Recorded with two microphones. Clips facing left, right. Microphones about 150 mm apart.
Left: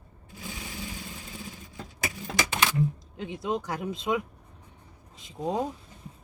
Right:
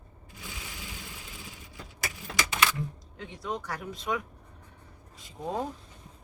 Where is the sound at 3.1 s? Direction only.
25° left (ahead or behind).